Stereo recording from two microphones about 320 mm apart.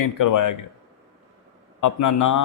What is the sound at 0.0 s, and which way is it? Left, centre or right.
Speech, left.